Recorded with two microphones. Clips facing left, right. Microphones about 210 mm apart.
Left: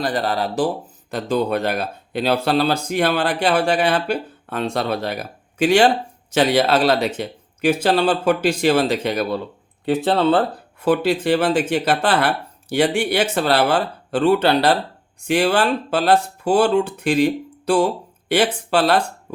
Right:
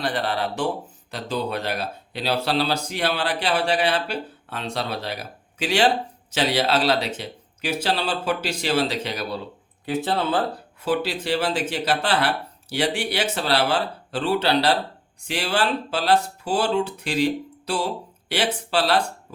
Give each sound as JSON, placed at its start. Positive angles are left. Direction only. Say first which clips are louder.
{"t": 0.0, "sound": "speech", "louder": "left 4 dB", "side_deg": 40}
{"t": 1.1, "sound": "speech", "louder": "left 7 dB", "side_deg": 50}
{"t": 9.8, "sound": "speech", "louder": "left 7 dB", "side_deg": 65}